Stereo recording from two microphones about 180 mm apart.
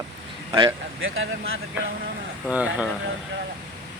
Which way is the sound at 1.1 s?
90° right.